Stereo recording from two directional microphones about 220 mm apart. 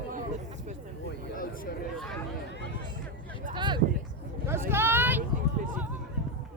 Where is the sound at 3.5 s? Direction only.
20° right (ahead or behind).